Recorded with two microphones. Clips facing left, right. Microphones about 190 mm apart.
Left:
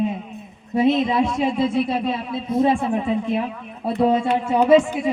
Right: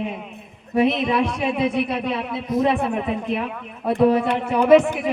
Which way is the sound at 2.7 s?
65° right (ahead or behind).